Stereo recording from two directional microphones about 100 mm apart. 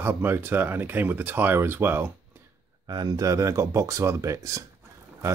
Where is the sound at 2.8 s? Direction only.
45° right (ahead or behind).